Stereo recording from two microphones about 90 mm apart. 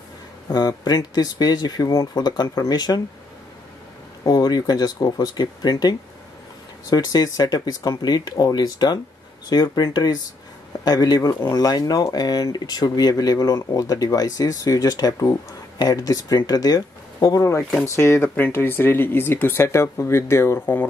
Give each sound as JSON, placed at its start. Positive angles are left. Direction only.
{"t": 0.5, "sound": "speech", "side_deg": 50}
{"t": 4.2, "sound": "speech", "side_deg": 45}